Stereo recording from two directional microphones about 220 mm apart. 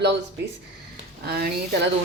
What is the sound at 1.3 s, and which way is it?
Speech, 45° right (ahead or behind).